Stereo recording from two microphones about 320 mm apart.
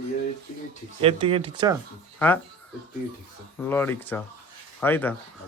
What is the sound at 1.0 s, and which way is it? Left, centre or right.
Speech, centre.